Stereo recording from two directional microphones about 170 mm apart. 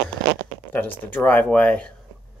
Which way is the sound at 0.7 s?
10° left (ahead or behind).